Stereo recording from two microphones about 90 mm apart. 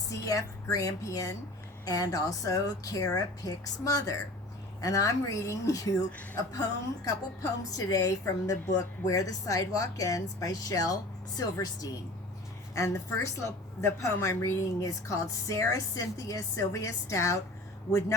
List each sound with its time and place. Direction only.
0.1 s a woman's voice: 40° left (ahead or behind)